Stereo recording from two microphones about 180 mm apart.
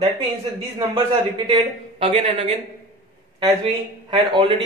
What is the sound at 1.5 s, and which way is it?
Speech, 30° right (ahead or behind).